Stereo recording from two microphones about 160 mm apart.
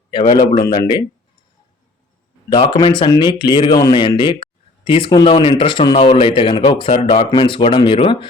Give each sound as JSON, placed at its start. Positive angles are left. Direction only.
{"t": 0.1, "sound": "a man's voice", "side_deg": 30}
{"t": 2.5, "sound": "speech", "side_deg": 30}